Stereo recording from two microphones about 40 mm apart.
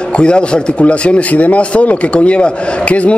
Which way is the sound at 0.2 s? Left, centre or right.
Left.